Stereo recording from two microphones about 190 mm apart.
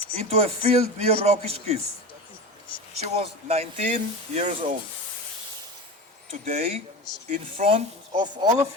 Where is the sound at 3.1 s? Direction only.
35° right (ahead or behind).